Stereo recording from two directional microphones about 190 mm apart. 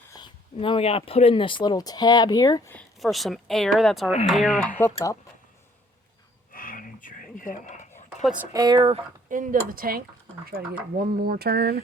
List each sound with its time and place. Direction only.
0.1 s speech: 25° left (ahead or behind)
2.7 s speech: centre (ahead or behind)
4.8 s speech: 15° left (ahead or behind)
6.5 s a sound: 50° left (ahead or behind)
8.5 s speech: 20° right (ahead or behind)
9.3 s speech: 45° right (ahead or behind)